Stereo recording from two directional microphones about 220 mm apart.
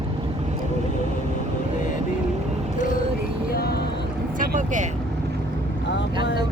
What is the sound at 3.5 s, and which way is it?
Vehicle, 45° left (ahead or behind).